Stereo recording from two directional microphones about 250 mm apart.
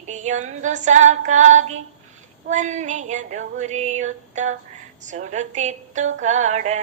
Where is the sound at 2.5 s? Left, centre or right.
Right.